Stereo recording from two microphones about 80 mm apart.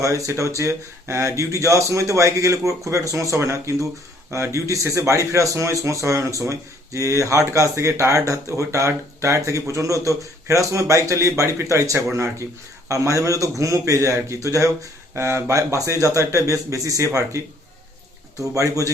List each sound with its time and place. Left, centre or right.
0.0 s a man's voice: right